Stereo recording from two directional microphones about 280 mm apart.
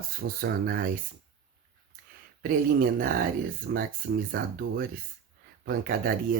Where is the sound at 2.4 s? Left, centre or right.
Right.